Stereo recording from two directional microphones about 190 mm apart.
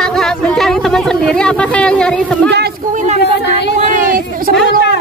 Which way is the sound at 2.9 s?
35° right (ahead or behind).